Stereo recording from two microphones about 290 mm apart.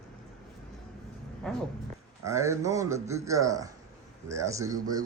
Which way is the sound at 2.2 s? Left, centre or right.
Centre.